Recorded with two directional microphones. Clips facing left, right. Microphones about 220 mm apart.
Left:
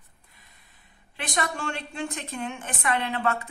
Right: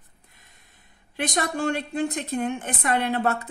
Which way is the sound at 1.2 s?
45° right (ahead or behind).